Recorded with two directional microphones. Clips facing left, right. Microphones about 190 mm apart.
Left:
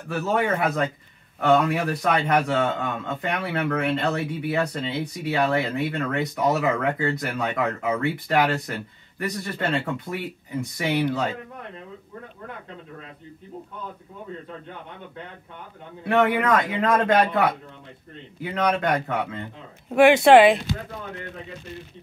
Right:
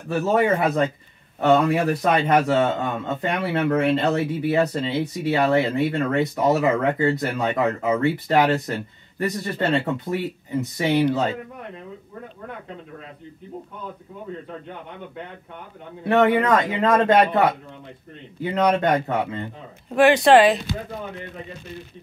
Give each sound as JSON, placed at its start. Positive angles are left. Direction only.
{"t": 0.1, "sound": "a man's voice", "side_deg": -30}
{"t": 16.1, "sound": "a man's voice", "side_deg": -30}
{"t": 19.9, "sound": "speech", "side_deg": 10}